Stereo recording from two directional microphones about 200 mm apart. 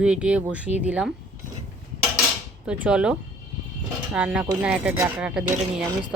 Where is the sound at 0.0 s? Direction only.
5° right (ahead or behind).